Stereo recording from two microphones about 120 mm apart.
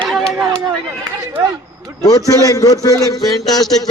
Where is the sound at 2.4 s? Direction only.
30° left (ahead or behind).